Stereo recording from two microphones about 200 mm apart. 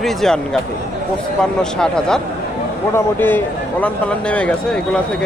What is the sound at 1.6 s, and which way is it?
Speech, 5° left (ahead or behind).